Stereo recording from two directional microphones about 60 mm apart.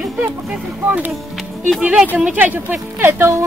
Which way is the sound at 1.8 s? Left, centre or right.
Centre.